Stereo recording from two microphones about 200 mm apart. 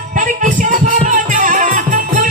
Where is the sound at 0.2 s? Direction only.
40° right (ahead or behind).